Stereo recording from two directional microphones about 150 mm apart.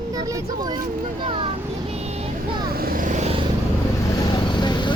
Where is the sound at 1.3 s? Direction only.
35° right (ahead or behind).